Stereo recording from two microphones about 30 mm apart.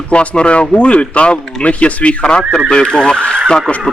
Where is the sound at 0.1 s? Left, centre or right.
Left.